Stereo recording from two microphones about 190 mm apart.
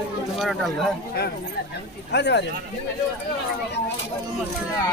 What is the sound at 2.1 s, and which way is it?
Speech, 65° left (ahead or behind).